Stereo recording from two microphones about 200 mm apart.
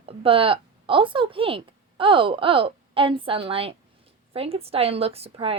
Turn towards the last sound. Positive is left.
turn(degrees=-30)  # may be behind; listen again after turning